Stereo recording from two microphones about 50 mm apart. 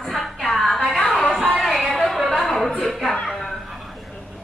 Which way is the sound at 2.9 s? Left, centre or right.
Centre.